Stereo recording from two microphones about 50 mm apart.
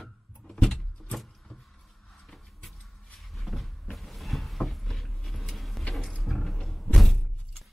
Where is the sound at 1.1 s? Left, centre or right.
Centre.